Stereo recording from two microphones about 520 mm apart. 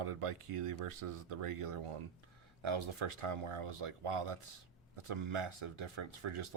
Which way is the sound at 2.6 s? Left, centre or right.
Right.